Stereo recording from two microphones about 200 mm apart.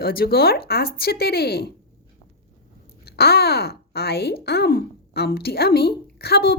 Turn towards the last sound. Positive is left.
turn(degrees=50)  # may be behind; listen again after turning